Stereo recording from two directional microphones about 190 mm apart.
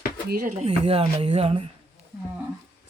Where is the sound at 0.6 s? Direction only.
30° right (ahead or behind).